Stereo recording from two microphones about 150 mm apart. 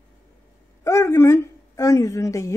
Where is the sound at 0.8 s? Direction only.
20° left (ahead or behind).